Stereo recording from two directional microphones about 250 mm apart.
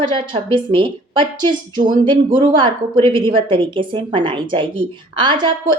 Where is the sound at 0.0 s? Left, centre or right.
Centre.